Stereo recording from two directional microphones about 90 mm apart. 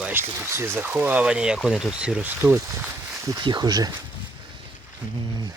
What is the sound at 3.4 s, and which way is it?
Speech, 50° right (ahead or behind).